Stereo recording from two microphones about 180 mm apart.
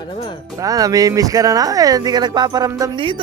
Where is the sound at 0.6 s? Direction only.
20° right (ahead or behind).